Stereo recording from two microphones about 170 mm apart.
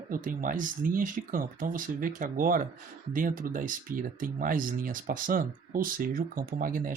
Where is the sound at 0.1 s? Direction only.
50° right (ahead or behind).